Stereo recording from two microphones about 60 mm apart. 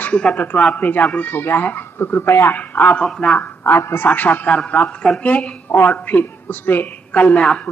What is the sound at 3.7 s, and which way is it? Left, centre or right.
Speech, left.